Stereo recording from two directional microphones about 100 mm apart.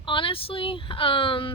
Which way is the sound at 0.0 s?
55° left (ahead or behind).